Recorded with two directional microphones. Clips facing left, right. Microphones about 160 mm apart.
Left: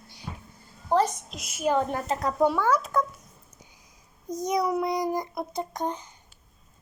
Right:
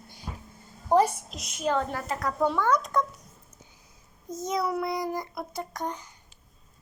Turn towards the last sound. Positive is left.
turn(degrees=20)  # may be behind; listen again after turning